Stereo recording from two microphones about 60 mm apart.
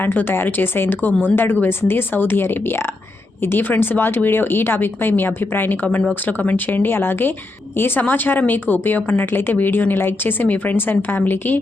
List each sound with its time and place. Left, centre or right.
0.0 s a woman's voice: left